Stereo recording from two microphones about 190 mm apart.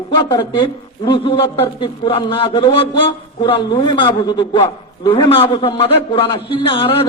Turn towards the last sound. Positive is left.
turn(degrees=30)  # may be behind; listen again after turning